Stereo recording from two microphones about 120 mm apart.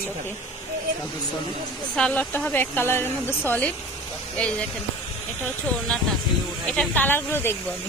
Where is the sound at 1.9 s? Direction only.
10° left (ahead or behind).